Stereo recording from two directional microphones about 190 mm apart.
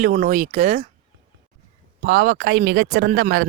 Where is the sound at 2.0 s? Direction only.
50° right (ahead or behind).